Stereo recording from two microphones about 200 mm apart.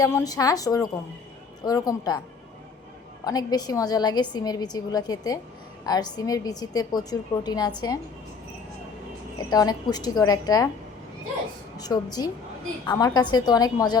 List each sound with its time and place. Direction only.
0.0 s a woman's voice: 20° left (ahead or behind)
3.2 s a woman's voice: 20° left (ahead or behind)
9.4 s a woman's voice: 20° left (ahead or behind)
11.9 s a woman's voice: 15° left (ahead or behind)